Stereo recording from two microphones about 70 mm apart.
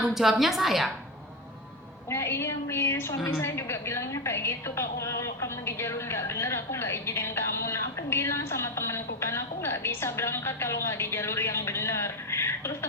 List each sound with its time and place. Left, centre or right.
0.0 s a woman's voice: centre
2.0 s a woman's voice: left